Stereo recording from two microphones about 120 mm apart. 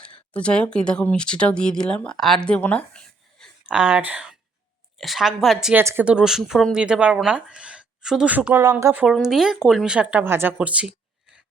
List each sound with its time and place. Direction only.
0.0 s speech: 10° left (ahead or behind)
3.7 s a woman's voice: 10° right (ahead or behind)
5.7 s speech: 20° right (ahead or behind)
6.1 s a woman's voice: 5° right (ahead or behind)
9.2 s a woman's voice: 5° right (ahead or behind)